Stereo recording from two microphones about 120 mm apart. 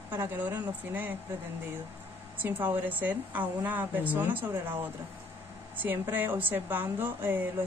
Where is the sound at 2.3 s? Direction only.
15° right (ahead or behind).